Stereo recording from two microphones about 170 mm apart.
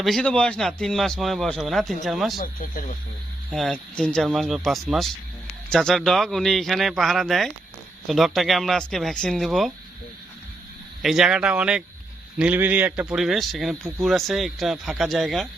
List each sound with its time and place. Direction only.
0.0 s speech: centre (ahead or behind)
2.4 s speech: 55° left (ahead or behind)
3.5 s speech: 5° left (ahead or behind)
11.0 s speech: centre (ahead or behind)